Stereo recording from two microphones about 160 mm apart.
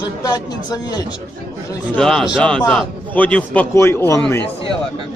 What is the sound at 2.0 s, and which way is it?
A man's voice, 5° left (ahead or behind).